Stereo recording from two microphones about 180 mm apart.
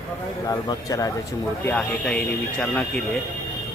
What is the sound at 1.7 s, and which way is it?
Speech, 5° left (ahead or behind).